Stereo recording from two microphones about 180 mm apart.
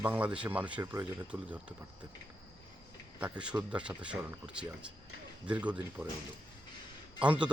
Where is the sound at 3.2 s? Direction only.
5° right (ahead or behind).